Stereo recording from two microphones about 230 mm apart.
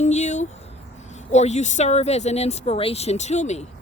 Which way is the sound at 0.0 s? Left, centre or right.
Left.